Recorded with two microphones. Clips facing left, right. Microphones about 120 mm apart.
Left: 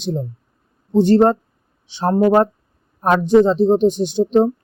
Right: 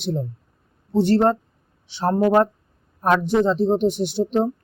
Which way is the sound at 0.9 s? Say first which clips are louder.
Left 4 dB; 15° left (ahead or behind).